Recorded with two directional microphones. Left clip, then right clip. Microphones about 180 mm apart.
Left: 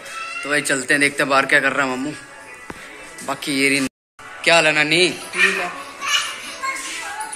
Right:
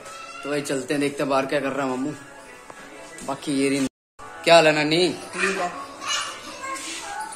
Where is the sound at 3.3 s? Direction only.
5° right (ahead or behind).